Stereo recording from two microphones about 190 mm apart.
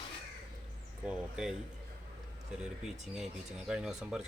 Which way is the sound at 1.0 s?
5° right (ahead or behind).